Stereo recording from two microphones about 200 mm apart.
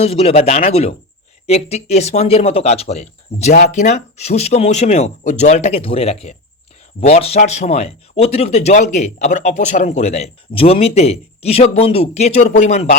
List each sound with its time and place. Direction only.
0.0 s speech: 30° left (ahead or behind)